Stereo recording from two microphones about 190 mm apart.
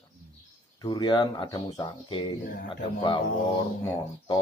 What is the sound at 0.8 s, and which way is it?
Speech, 25° left (ahead or behind).